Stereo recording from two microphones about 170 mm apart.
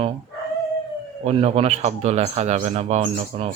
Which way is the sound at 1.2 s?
35° right (ahead or behind).